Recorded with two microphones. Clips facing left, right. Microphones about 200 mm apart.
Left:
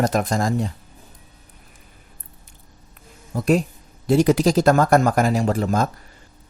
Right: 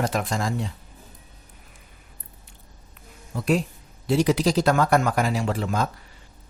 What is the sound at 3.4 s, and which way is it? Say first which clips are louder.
Speech: left 4 dB; 45° left (ahead or behind).